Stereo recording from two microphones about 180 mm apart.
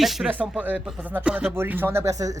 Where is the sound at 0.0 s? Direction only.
Centre (ahead or behind).